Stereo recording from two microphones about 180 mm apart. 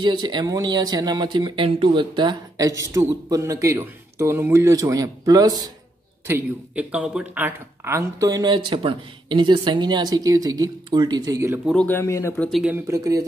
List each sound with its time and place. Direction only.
0.0 s speech: 25° right (ahead or behind)
6.2 s speech: 10° right (ahead or behind)
11.6 s speech: 5° left (ahead or behind)
12.4 s speech: centre (ahead or behind)
12.7 s speech: 15° right (ahead or behind)